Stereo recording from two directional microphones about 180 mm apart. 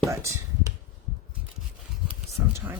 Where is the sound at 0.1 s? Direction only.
15° right (ahead or behind).